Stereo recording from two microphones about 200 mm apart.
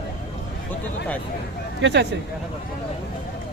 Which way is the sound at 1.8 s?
60° right (ahead or behind).